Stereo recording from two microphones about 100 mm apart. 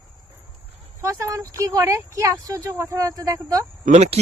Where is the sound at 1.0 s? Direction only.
35° right (ahead or behind).